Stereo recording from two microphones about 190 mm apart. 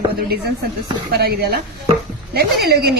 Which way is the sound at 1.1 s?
55° right (ahead or behind).